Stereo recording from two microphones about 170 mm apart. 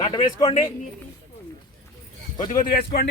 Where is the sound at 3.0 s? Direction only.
65° left (ahead or behind).